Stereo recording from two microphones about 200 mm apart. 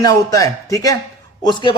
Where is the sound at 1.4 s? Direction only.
20° left (ahead or behind).